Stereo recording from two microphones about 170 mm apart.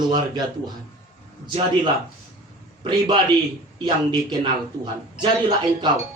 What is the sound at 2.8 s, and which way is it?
Speech, 25° right (ahead or behind).